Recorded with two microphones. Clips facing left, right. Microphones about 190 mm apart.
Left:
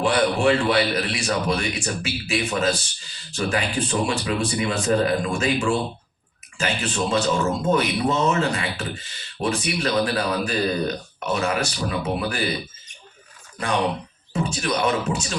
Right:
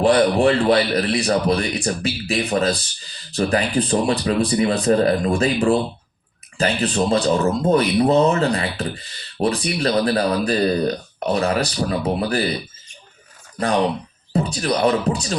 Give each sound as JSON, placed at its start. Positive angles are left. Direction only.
{"t": 0.0, "sound": "speech", "side_deg": -35}
{"t": 14.3, "sound": "speech", "side_deg": -35}